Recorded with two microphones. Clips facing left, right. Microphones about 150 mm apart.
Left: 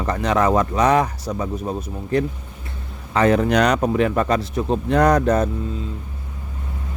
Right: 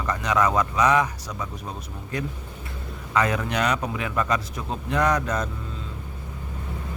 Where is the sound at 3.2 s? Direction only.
30° left (ahead or behind).